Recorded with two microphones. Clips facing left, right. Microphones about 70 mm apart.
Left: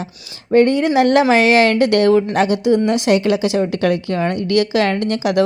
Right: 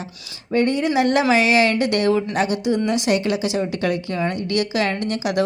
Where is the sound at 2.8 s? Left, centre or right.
Left.